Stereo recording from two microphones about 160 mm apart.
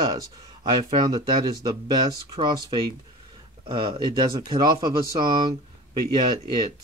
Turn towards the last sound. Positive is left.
turn(degrees=-25)  # may be behind; listen again after turning